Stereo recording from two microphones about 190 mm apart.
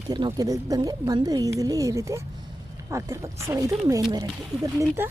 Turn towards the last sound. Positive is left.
turn(degrees=-15)  # may be behind; listen again after turning